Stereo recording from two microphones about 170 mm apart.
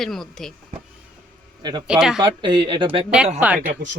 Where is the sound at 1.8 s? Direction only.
5° right (ahead or behind).